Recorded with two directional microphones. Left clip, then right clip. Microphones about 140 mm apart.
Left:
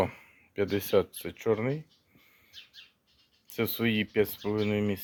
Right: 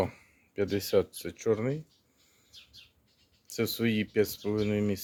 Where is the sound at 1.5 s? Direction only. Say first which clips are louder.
Left 1 dB; 20° right (ahead or behind).